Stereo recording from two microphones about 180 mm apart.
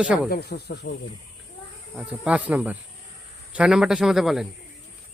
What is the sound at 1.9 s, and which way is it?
Speech, 5° right (ahead or behind).